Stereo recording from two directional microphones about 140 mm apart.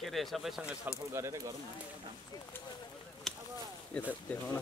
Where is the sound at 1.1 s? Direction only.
20° right (ahead or behind).